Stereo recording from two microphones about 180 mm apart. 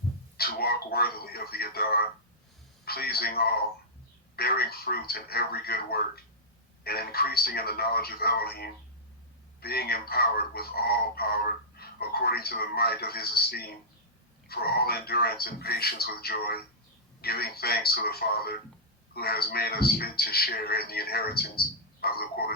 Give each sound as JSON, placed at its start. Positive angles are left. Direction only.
{"t": 0.3, "sound": "speech", "side_deg": 60}